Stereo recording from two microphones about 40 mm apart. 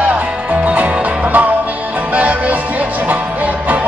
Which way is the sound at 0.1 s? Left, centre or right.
Right.